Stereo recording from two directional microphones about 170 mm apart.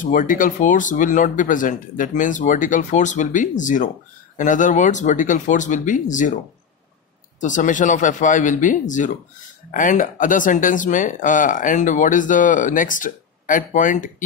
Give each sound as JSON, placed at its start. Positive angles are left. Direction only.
{"t": 0.0, "sound": "speech", "side_deg": 55}